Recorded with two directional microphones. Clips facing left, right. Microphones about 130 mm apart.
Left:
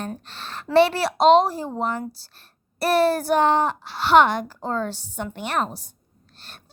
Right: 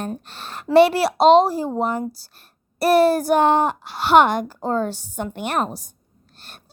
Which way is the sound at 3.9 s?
45° right (ahead or behind).